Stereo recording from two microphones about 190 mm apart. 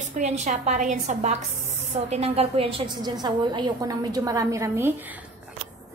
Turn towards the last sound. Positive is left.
turn(degrees=-15)  # may be behind; listen again after turning